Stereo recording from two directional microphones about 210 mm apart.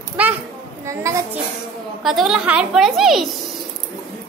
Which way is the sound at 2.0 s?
Centre (ahead or behind).